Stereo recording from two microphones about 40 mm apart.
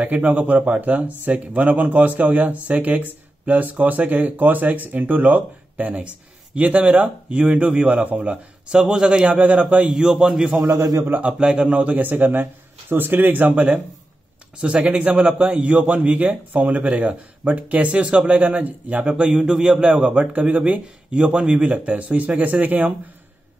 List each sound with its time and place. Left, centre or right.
0.0 s speech: right
8.3 s a man's voice: centre
9.2 s speech: right
10.0 s a man's voice: centre
10.6 s a man's voice: right
11.2 s a man's voice: right
12.0 s speech: right
14.8 s speech: right
19.2 s a man's voice: right
19.8 s speech: right